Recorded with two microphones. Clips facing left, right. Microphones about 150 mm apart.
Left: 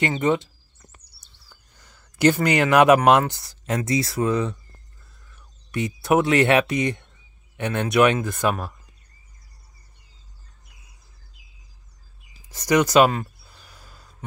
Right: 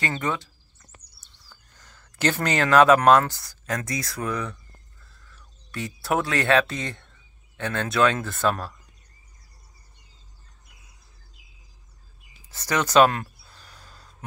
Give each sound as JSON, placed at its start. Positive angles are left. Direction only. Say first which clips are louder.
{"t": 0.2, "sound": "speech", "louder": "left 7 dB", "side_deg": 20}
{"t": 1.2, "sound": "speech", "louder": "even", "side_deg": 10}
{"t": 12.4, "sound": "a sound", "louder": "left 7 dB", "side_deg": 15}